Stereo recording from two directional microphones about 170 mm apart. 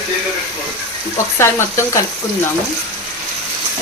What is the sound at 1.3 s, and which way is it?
Speech, 15° left (ahead or behind).